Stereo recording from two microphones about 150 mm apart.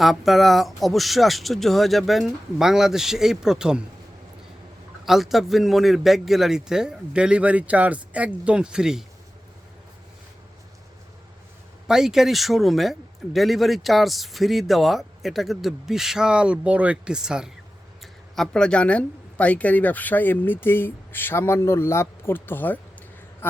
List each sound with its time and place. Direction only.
0.0 s speech: centre (ahead or behind)
5.0 s speech: centre (ahead or behind)
11.9 s speech: 5° right (ahead or behind); by 23.6 s 15° left (ahead or behind)